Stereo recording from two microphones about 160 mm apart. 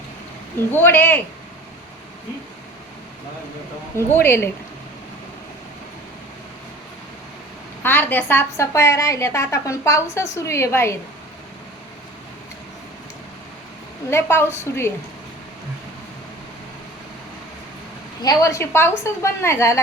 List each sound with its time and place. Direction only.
0.7 s a woman's voice: 10° left (ahead or behind)
3.9 s a woman's voice: 15° left (ahead or behind)
7.8 s a woman's voice: 15° left (ahead or behind)
14.1 s a woman's voice: 15° left (ahead or behind)
18.2 s a woman's voice: 20° left (ahead or behind)